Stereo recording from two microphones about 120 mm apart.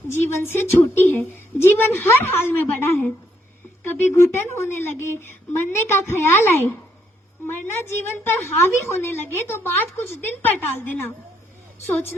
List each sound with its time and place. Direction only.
0.1 s a woman's voice: 20° left (ahead or behind)